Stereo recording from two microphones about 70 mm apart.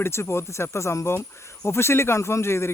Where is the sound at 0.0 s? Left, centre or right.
Left.